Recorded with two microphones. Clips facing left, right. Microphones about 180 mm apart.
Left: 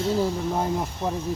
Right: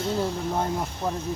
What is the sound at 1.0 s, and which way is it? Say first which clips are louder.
Speech: even; 5° left (ahead or behind).